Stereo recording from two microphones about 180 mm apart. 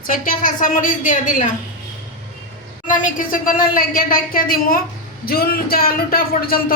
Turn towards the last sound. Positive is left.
turn(degrees=55)  # may be behind; listen again after turning